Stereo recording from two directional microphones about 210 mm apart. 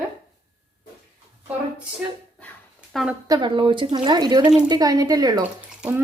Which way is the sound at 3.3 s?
25° right (ahead or behind).